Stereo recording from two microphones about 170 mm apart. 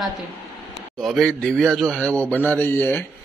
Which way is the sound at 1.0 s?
Centre (ahead or behind).